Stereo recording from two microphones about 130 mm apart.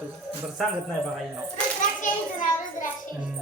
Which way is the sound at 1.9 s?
90° left.